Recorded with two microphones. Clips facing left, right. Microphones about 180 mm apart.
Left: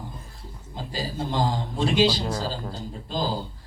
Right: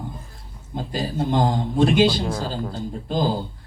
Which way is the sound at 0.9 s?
55° right (ahead or behind).